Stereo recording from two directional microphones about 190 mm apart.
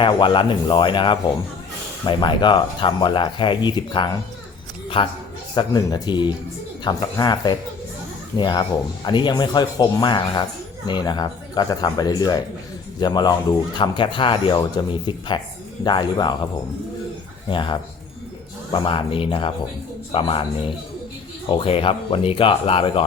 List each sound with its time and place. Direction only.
0.0 s speech: 25° left (ahead or behind)
17.5 s speech: 25° left (ahead or behind)